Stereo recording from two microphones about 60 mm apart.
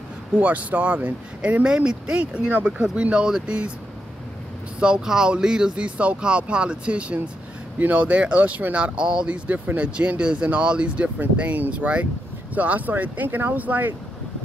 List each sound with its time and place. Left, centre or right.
0.3 s speech: right
4.7 s speech: centre